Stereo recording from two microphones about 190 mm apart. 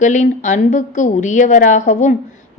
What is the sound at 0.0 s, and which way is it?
A woman's voice, 40° left (ahead or behind).